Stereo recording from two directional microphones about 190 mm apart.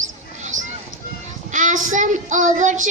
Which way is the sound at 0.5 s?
90° right.